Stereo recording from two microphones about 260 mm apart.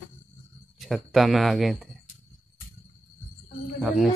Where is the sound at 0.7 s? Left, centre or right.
Centre.